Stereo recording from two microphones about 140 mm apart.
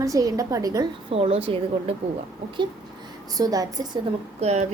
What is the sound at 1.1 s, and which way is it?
Speech, 45° right (ahead or behind).